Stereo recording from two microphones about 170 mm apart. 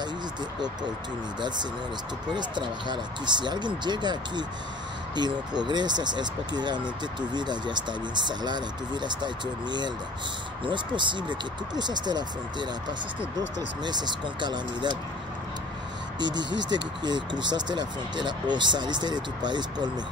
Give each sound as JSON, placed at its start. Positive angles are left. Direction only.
{"t": 2.3, "sound": "speech", "side_deg": -25}
{"t": 16.2, "sound": "speech", "side_deg": -25}